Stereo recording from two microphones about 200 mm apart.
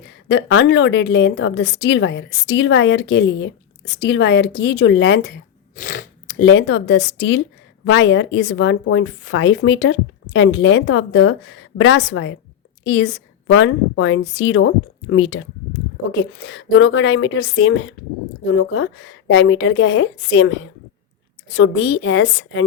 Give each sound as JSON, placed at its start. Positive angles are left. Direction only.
{"t": 0.3, "sound": "a woman's voice", "side_deg": 60}
{"t": 5.7, "sound": "biting", "side_deg": 45}
{"t": 6.4, "sound": "a woman's voice", "side_deg": 65}